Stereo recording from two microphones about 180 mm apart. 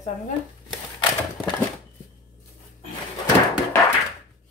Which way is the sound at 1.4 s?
Centre (ahead or behind).